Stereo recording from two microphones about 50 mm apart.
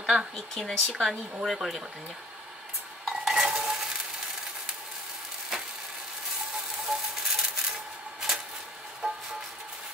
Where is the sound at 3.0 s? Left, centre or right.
Centre.